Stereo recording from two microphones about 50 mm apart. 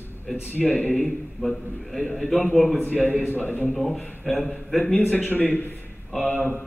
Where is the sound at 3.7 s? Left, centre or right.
Centre.